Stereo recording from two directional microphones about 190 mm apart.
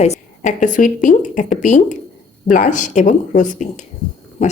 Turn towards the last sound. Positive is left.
turn(degrees=35)  # may be behind; listen again after turning